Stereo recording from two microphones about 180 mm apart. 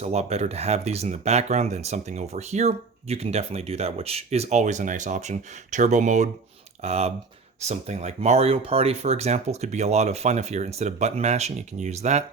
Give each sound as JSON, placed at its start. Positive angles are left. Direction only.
{"t": 0.0, "sound": "speech", "side_deg": -35}